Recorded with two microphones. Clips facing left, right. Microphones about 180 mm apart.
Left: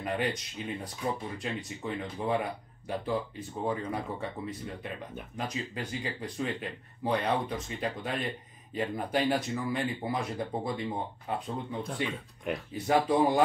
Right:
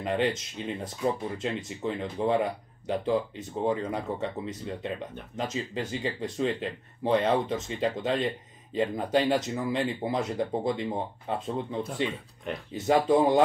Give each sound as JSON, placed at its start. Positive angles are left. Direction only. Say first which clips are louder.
{"t": 0.0, "sound": "speech", "louder": "right 4 dB", "side_deg": -25}
{"t": 12.7, "sound": "speech", "louder": "right 4 dB", "side_deg": -25}